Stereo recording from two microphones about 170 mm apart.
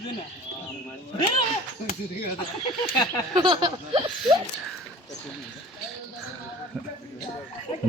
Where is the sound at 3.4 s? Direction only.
25° right (ahead or behind).